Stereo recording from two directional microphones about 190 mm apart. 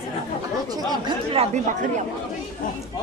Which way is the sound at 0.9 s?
25° right (ahead or behind).